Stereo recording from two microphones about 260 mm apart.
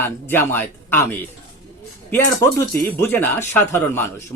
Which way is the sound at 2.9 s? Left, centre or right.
Centre.